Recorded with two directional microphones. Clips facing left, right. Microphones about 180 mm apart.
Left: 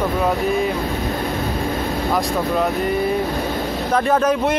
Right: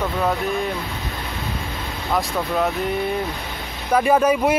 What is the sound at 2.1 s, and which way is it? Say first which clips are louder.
Speech: even; centre (ahead or behind).